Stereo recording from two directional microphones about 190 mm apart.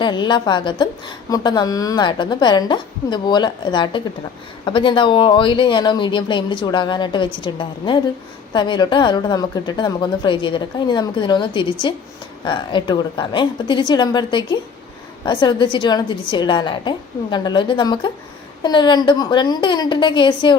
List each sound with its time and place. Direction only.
0.0 s a woman's voice: 25° left (ahead or behind)